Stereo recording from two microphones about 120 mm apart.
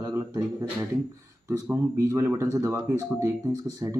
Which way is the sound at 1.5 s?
20° right (ahead or behind).